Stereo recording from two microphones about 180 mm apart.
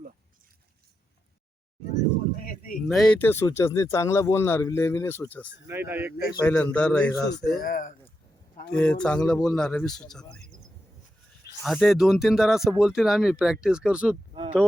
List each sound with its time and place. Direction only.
2.3 s a sound: 50° left (ahead or behind)
2.8 s speech: centre (ahead or behind)
5.6 s speech: 10° right (ahead or behind)
6.4 s speech: 5° left (ahead or behind)
7.1 s speech: 20° left (ahead or behind)
7.6 s speech: 50° left (ahead or behind)
8.7 s speech: 5° left (ahead or behind)
11.6 s speech: centre (ahead or behind)